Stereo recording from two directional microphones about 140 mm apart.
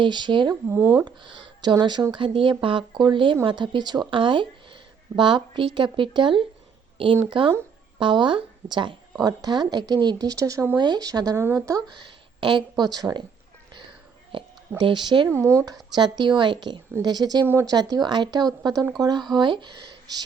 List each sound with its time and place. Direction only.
0.0 s speech: 35° right (ahead or behind)
0.7 s speech: 15° right (ahead or behind)
1.0 s speech: 30° right (ahead or behind)
14.3 s speech: 35° right (ahead or behind)
15.3 s speech: 20° right (ahead or behind)
17.4 s speech: 20° right (ahead or behind)